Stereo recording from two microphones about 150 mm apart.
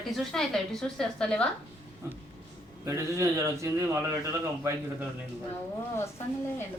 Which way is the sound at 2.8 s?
20° right (ahead or behind).